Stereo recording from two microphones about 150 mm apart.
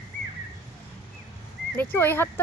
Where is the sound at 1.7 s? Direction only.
15° left (ahead or behind).